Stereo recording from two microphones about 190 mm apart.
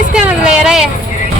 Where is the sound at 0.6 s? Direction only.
5° right (ahead or behind).